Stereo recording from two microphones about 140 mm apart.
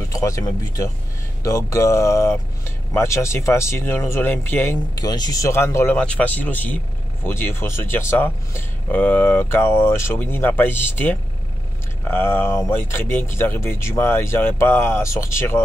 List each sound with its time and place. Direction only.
0.1 s speech: 20° left (ahead or behind)
4.9 s speech: 30° left (ahead or behind)